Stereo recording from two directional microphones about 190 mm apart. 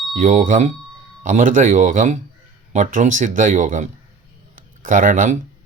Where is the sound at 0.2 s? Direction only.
45° right (ahead or behind).